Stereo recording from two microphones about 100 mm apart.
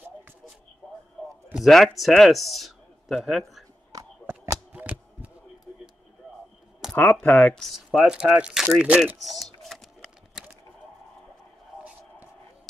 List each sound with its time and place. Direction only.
1.5 s a man's voice: centre (ahead or behind)
3.9 s a sound: 35° right (ahead or behind)
4.7 s a sound: 15° right (ahead or behind)
7.0 s speech: 15° left (ahead or behind)
7.6 s speech: 5° right (ahead or behind)
9.2 s typing: centre (ahead or behind)